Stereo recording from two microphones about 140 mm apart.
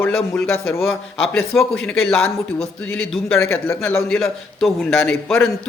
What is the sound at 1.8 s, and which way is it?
Speech, 5° left (ahead or behind).